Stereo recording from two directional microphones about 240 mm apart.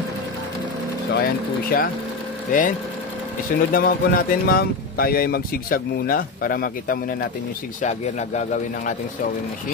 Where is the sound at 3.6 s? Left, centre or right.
Left.